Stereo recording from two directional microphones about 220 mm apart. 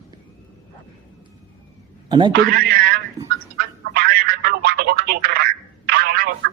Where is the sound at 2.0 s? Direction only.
20° right (ahead or behind).